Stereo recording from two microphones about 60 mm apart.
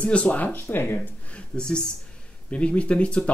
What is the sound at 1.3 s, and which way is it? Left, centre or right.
Speech, centre.